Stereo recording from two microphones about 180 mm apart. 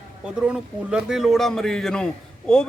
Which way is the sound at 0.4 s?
5° right (ahead or behind).